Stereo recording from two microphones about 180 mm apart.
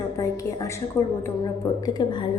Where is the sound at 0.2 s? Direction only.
15° left (ahead or behind).